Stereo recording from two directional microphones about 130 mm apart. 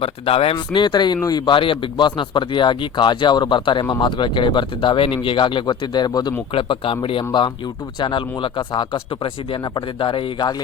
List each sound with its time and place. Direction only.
0.0 s speech: 50° left (ahead or behind)
0.5 s speech: 35° left (ahead or behind)
6.5 s speech: 40° left (ahead or behind)